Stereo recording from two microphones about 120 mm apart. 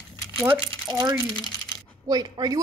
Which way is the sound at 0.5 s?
35° right (ahead or behind).